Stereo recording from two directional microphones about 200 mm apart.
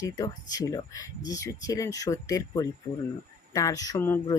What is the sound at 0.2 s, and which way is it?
Speech, 20° left (ahead or behind).